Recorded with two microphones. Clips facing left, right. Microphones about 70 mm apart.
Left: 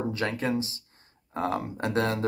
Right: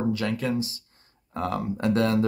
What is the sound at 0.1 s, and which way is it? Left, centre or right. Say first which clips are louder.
Speech: right 2 dB; left.